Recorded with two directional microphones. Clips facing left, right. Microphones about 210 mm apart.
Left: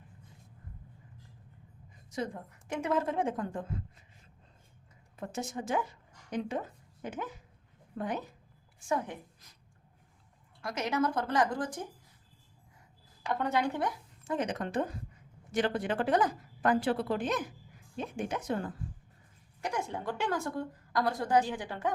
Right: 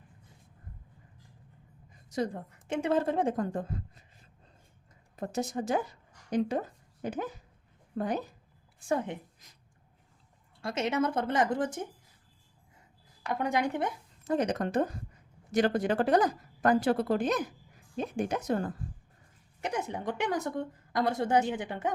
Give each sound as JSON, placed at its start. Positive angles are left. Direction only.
{"t": 2.0, "sound": "a woman's voice", "side_deg": -40}
{"t": 5.1, "sound": "a woman's voice", "side_deg": -40}
{"t": 10.6, "sound": "a woman's voice", "side_deg": -25}
{"t": 13.2, "sound": "a woman's voice", "side_deg": -15}
{"t": 14.3, "sound": "a woman's voice", "side_deg": -40}
{"t": 19.6, "sound": "a woman's voice", "side_deg": -20}